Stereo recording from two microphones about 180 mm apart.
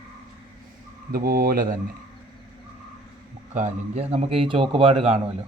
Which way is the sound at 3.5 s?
40° right (ahead or behind).